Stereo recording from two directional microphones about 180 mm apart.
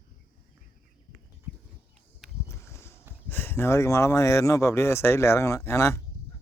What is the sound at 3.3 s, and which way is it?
Speech, 10° left (ahead or behind).